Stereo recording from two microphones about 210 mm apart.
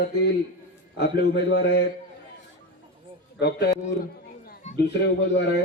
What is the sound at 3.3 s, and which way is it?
Speech, 50° left (ahead or behind).